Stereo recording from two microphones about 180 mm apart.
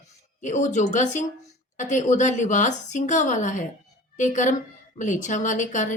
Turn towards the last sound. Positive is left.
turn(degrees=45)  # may be behind; listen again after turning